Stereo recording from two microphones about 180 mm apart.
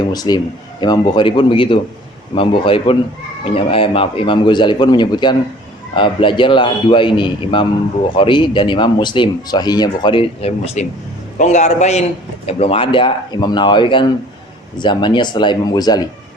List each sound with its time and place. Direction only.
0.1 s a man's voice: 20° left (ahead or behind)